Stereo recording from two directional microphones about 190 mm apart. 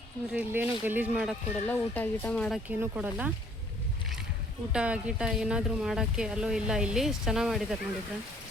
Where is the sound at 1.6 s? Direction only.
10° left (ahead or behind).